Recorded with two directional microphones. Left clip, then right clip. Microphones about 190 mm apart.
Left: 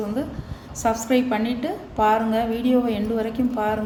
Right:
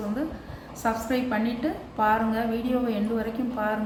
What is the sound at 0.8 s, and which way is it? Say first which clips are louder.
A woman's voice: left 6 dB; 45° left (ahead or behind).